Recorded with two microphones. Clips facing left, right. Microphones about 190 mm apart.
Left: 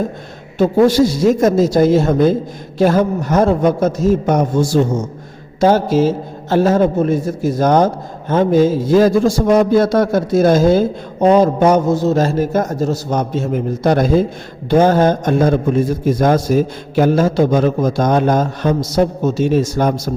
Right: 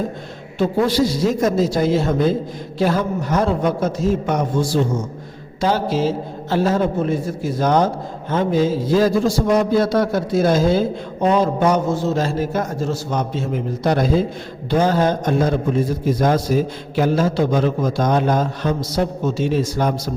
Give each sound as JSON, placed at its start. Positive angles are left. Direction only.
{"t": 0.6, "sound": "a man's voice", "side_deg": 45}